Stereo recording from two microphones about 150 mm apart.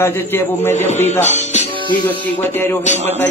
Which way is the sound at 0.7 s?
50° left (ahead or behind).